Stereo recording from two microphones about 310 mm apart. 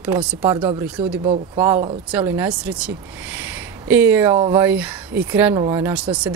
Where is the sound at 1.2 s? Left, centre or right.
Centre.